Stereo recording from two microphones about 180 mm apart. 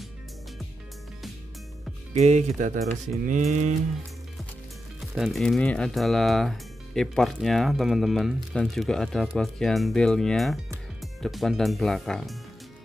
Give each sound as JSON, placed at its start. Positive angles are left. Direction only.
{"t": 2.1, "sound": "speech", "side_deg": -40}
{"t": 3.3, "sound": "cattle", "side_deg": -45}
{"t": 5.0, "sound": "speech", "side_deg": 0}